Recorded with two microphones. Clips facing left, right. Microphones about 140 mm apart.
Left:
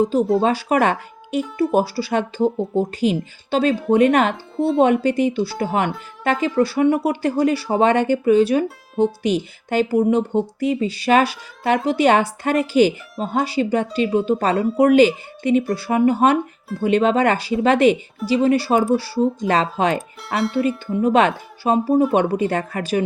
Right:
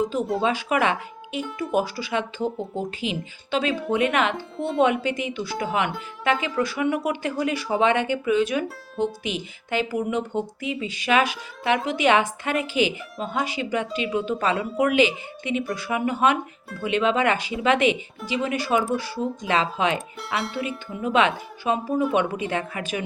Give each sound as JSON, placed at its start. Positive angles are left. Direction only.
{"t": 0.0, "sound": "speech", "side_deg": 35}
{"t": 4.4, "sound": "speech", "side_deg": 0}
{"t": 4.8, "sound": "speech", "side_deg": 35}
{"t": 20.0, "sound": "speech", "side_deg": 0}
{"t": 21.0, "sound": "speech", "side_deg": 40}